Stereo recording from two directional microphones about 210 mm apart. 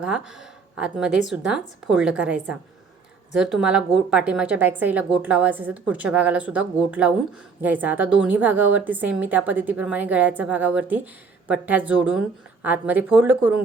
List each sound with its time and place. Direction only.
0.0 s a woman's voice: 5° right (ahead or behind)